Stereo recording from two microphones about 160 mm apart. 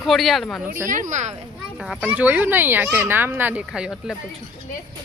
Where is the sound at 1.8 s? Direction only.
5° right (ahead or behind).